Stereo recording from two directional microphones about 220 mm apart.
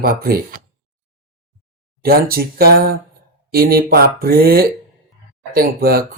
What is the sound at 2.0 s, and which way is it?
Speech, 45° right (ahead or behind).